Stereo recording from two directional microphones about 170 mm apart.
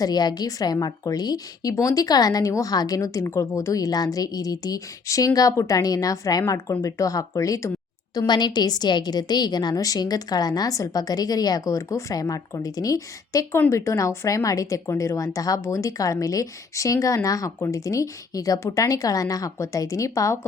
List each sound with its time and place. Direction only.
0.0 s a woman's voice: 25° left (ahead or behind)